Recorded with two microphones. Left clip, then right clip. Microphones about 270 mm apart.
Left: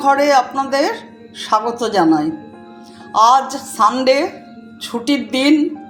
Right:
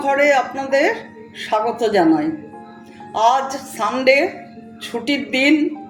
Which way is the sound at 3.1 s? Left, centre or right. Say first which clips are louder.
Left 4 dB; left.